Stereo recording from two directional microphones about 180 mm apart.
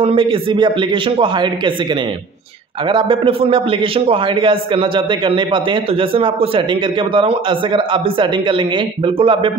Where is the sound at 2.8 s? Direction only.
30° right (ahead or behind).